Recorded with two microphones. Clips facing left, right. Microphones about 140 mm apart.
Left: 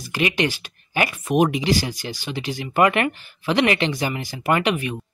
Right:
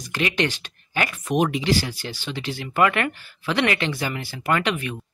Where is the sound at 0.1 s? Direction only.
10° left (ahead or behind).